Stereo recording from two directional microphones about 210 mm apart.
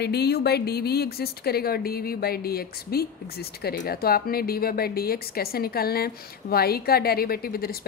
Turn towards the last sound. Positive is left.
turn(degrees=45)  # may be behind; listen again after turning